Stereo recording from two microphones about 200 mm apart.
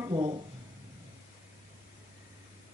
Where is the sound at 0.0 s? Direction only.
20° right (ahead or behind).